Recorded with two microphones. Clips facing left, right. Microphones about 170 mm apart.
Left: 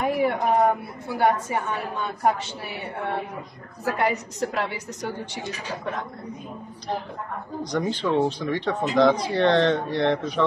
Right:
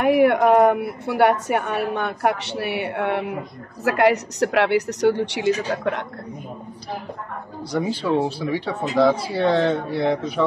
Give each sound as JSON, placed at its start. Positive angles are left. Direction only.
{"t": 0.0, "sound": "a woman's voice", "side_deg": -70}
{"t": 7.7, "sound": "speech", "side_deg": -10}